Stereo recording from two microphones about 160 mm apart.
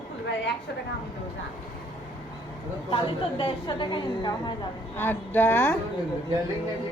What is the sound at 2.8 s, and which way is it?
A woman's voice, 35° left (ahead or behind).